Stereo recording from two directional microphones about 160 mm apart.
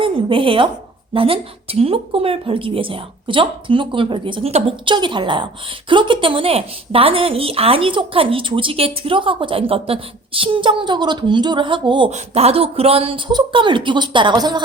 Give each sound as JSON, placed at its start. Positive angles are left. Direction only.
{"t": 0.0, "sound": "a woman's voice", "side_deg": -35}